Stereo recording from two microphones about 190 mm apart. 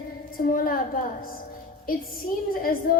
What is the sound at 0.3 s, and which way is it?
Speech, 50° left (ahead or behind).